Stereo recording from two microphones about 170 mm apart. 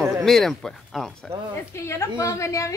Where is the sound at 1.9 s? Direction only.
15° left (ahead or behind).